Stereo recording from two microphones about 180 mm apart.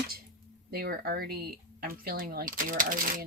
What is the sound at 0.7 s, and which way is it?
Speech, 60° right (ahead or behind).